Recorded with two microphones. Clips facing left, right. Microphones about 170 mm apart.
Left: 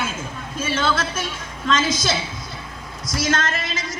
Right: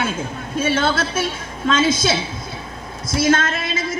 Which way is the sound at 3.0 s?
55° right (ahead or behind).